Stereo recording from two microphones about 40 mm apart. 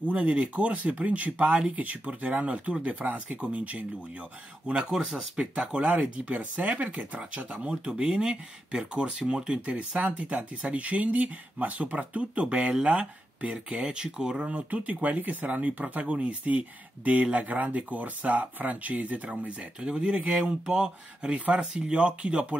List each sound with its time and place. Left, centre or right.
0.1 s speech: right
3.4 s speech: right
4.7 s speech: centre
6.1 s speech: right
14.4 s speech: right
19.2 s speech: right
21.3 s speech: right